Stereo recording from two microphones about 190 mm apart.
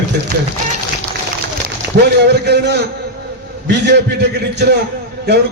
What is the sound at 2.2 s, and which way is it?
A man's voice, 60° right (ahead or behind).